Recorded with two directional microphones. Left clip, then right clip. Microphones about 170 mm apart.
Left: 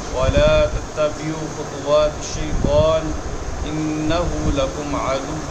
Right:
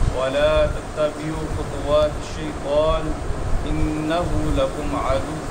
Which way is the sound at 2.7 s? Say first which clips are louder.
Left 3 dB; 20° left (ahead or behind).